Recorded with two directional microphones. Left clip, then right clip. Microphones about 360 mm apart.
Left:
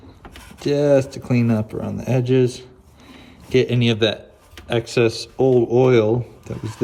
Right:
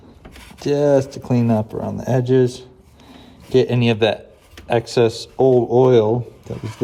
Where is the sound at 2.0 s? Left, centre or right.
Centre.